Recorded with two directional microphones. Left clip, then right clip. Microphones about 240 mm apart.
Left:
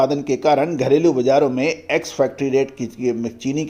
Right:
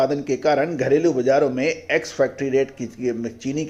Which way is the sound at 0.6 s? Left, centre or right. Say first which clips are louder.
Left 3 dB; left.